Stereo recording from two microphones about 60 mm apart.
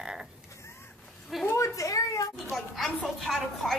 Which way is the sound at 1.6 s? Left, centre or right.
Left.